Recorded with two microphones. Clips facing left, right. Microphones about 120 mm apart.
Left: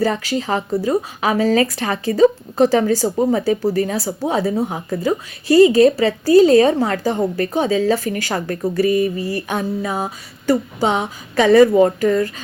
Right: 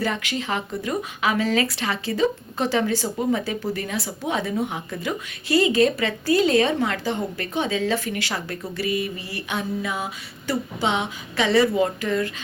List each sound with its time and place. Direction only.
0.0 s speech: 35° left (ahead or behind)